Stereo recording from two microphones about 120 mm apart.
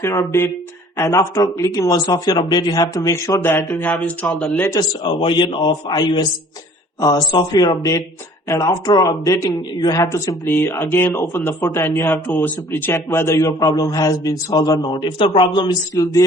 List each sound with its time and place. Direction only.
0.0 s a man's voice: 25° left (ahead or behind); by 4.5 s centre (ahead or behind)
4.5 s a man's voice: 20° left (ahead or behind)
4.8 s a man's voice: 40° left (ahead or behind)
14.9 s a man's voice: 45° left (ahead or behind)